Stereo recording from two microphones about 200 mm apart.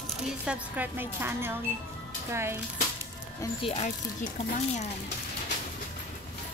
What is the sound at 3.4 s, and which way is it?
Speech, 25° left (ahead or behind).